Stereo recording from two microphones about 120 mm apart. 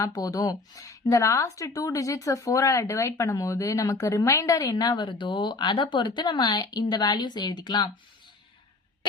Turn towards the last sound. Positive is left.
turn(degrees=40)  # may be behind; listen again after turning